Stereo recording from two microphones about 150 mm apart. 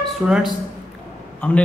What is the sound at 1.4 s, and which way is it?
Speech, 10° left (ahead or behind).